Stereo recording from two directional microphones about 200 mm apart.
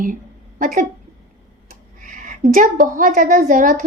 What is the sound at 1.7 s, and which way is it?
A woman's voice, 40° right (ahead or behind).